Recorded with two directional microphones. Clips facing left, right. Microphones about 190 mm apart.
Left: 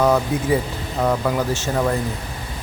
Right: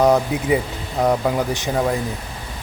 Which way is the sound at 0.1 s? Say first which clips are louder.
Right 1 dB; 15° right (ahead or behind).